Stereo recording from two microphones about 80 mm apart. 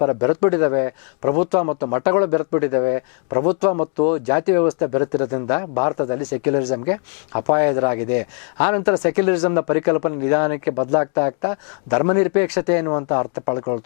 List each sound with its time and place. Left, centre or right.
0.0 s speech: left